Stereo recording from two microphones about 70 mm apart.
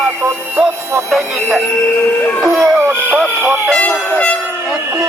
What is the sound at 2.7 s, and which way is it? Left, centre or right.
Speech, right.